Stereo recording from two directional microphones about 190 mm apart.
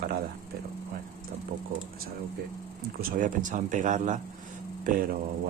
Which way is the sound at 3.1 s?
45° right (ahead or behind).